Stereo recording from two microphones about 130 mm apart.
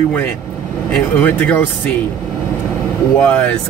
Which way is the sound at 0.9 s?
10° left (ahead or behind).